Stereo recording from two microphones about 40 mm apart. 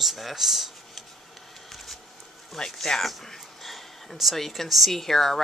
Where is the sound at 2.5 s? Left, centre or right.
Centre.